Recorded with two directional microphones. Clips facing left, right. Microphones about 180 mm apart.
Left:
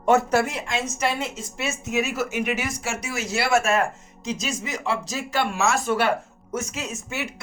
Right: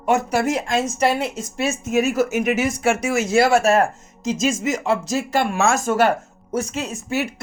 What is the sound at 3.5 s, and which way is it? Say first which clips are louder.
Speech: right 5 dB; 35° right (ahead or behind).